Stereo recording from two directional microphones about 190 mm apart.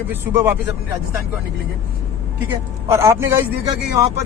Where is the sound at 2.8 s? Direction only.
15° right (ahead or behind).